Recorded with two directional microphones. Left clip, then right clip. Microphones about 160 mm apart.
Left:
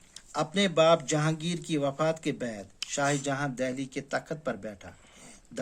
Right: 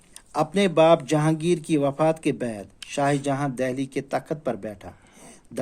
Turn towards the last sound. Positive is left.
turn(degrees=-40)  # may be behind; listen again after turning